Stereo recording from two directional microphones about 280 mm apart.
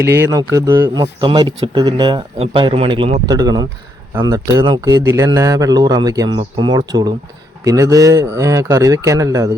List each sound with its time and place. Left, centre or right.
0.1 s a man's voice: centre